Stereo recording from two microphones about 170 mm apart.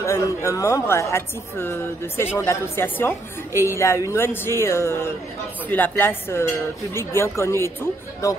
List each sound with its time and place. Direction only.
0.0 s a woman's voice: 15° left (ahead or behind)